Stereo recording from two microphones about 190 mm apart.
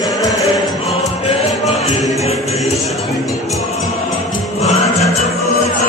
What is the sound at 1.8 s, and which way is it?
Music, 35° left (ahead or behind).